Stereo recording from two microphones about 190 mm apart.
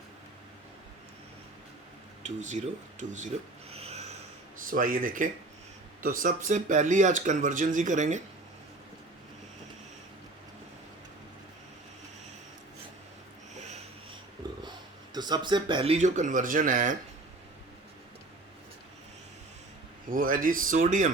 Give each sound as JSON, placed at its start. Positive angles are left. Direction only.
{"t": 2.2, "sound": "speech", "side_deg": -40}
{"t": 3.7, "sound": "a sound", "side_deg": -35}
{"t": 4.6, "sound": "speech", "side_deg": -45}
{"t": 13.5, "sound": "wheeze", "side_deg": -35}
{"t": 14.4, "sound": "a sound", "side_deg": -25}
{"t": 15.1, "sound": "speech", "side_deg": -20}
{"t": 20.1, "sound": "speech", "side_deg": -45}